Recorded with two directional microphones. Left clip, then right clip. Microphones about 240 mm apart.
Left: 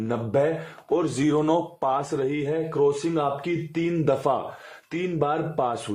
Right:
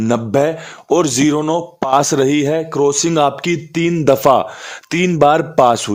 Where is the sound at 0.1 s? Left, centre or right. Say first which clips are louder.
Right 8 dB; right.